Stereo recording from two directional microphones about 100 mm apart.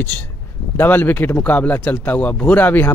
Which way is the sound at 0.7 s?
20° left (ahead or behind).